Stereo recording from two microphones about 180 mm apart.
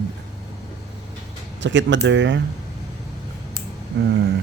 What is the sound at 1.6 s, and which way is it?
Speech, 90° right.